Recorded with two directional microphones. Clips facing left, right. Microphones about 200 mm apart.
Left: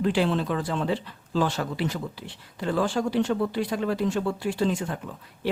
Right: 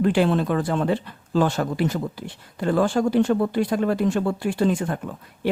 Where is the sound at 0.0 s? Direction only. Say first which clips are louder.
Right 4 dB; 55° right (ahead or behind).